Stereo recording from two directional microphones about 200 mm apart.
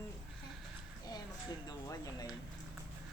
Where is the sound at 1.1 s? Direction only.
20° left (ahead or behind).